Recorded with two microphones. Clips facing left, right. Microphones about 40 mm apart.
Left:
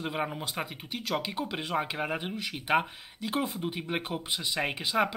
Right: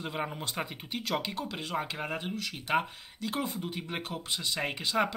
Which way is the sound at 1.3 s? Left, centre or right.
Centre.